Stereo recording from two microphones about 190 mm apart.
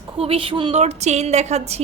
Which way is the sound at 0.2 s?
30° right (ahead or behind).